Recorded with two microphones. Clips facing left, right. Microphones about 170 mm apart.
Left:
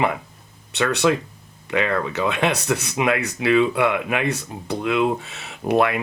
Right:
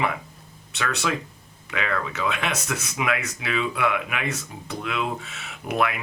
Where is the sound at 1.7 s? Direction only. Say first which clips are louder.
Left 6 dB; 30° left (ahead or behind).